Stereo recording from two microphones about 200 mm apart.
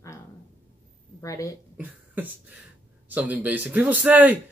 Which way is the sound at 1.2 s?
15° left (ahead or behind).